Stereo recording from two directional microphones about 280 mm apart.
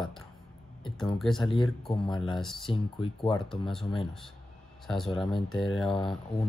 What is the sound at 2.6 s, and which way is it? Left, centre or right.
Speech, centre.